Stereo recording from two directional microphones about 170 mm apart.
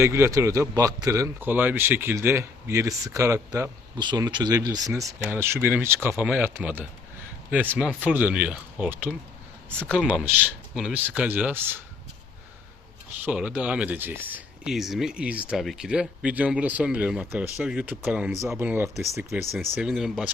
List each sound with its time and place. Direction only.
0.0 s speech: 15° right (ahead or behind)
13.2 s speech: 10° right (ahead or behind)
19.5 s speech: 5° right (ahead or behind)